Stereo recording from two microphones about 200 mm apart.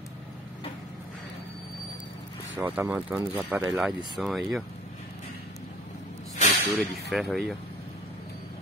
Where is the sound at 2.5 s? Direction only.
10° right (ahead or behind).